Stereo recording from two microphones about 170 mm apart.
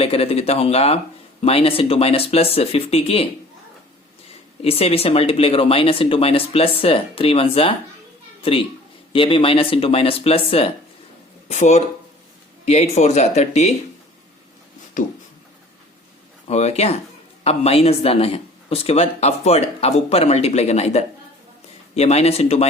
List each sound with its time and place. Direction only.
0.0 s speech: 35° left (ahead or behind)
4.6 s a woman's voice: 35° left (ahead or behind)
16.5 s speech: 40° left (ahead or behind)